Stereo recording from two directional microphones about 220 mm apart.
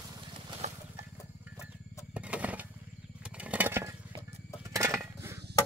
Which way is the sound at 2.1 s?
5° right (ahead or behind).